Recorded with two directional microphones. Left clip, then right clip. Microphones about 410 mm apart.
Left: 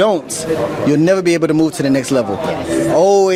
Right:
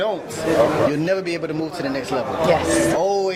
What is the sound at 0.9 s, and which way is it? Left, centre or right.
Speech, left.